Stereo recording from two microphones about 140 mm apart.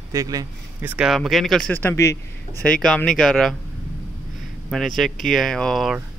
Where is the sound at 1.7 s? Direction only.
15° left (ahead or behind).